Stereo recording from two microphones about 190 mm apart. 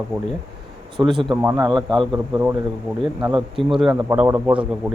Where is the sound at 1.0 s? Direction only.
25° right (ahead or behind).